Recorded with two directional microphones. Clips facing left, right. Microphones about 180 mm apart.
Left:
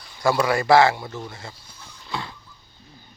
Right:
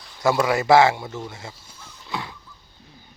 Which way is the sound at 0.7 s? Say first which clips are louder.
Right 1 dB; 20° right (ahead or behind).